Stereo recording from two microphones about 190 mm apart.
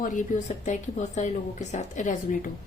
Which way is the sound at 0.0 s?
40° left (ahead or behind).